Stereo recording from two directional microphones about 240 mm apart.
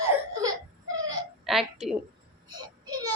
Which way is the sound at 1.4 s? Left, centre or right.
Centre.